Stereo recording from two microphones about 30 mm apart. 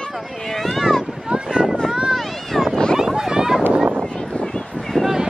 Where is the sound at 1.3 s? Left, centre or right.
Right.